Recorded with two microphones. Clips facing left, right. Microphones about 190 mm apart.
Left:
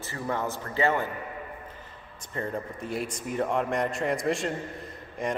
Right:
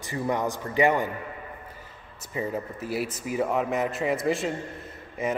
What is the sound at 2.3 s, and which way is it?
A man's voice, 5° right (ahead or behind).